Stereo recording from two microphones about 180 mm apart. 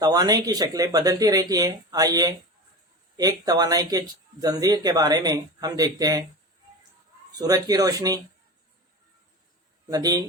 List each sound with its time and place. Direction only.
0.0 s speech: 20° right (ahead or behind)
7.3 s speech: 20° right (ahead or behind)
9.9 s speech: 20° right (ahead or behind)